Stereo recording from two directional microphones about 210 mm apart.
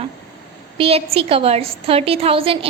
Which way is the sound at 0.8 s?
30° right (ahead or behind).